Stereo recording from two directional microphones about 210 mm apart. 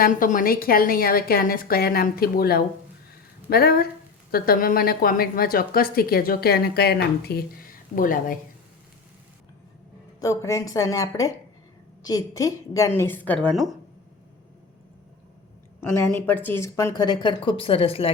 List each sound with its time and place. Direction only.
0.0 s a woman's voice: 40° left (ahead or behind)
10.2 s a woman's voice: 15° left (ahead or behind)
15.8 s a woman's voice: 10° left (ahead or behind); by 18.1 s 25° left (ahead or behind)